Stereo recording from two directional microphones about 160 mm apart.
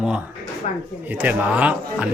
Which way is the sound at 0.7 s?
50° left (ahead or behind).